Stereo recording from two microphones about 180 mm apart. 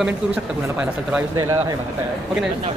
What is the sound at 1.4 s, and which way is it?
Speech, 20° right (ahead or behind).